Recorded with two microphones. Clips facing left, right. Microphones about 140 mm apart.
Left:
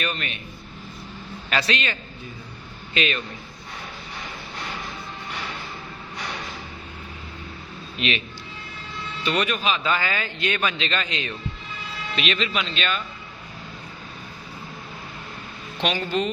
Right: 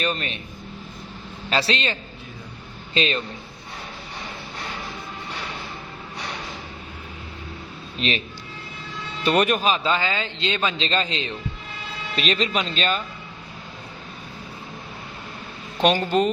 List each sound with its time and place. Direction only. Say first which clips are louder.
0.0 s speech: right 3 dB; 30° right (ahead or behind)
1.5 s a man's voice: right 2 dB; 30° right (ahead or behind)
7.9 s speech: right 1 dB; 35° right (ahead or behind)
9.2 s a man's voice: right 5 dB; 45° right (ahead or behind)
9.9 s a man's voice: right 2 dB; 20° right (ahead or behind)
15.8 s a man's voice: right 5 dB; 45° right (ahead or behind)